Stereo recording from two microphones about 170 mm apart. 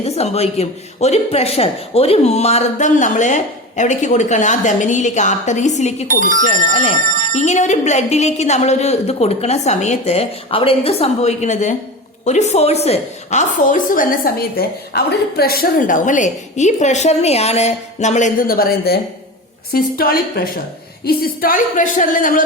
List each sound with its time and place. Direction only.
0.0 s a woman's voice: 40° left (ahead or behind)
6.1 s speech: 50° right (ahead or behind)
7.3 s a woman's voice: 45° left (ahead or behind)